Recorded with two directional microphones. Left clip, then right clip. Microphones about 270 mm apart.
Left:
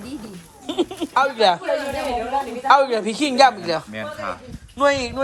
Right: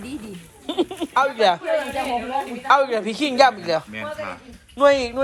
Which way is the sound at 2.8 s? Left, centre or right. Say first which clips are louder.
Left 2 dB; centre.